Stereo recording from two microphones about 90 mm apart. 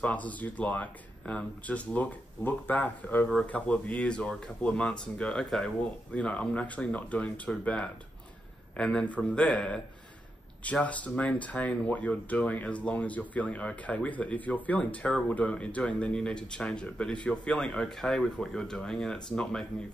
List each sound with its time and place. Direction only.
0.0 s speech: 15° left (ahead or behind)